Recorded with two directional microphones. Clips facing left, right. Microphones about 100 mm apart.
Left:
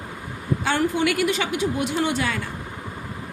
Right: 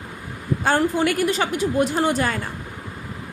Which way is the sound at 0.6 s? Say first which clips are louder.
Right 3 dB; 40° right (ahead or behind).